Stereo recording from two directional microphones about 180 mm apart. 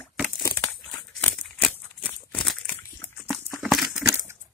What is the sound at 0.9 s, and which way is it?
Crumpling, 5° left (ahead or behind).